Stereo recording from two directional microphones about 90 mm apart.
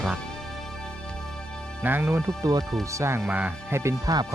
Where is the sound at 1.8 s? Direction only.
25° right (ahead or behind).